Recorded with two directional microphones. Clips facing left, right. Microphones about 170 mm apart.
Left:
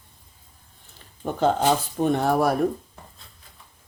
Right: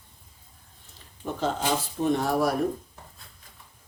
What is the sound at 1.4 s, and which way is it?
Speech, 60° left (ahead or behind).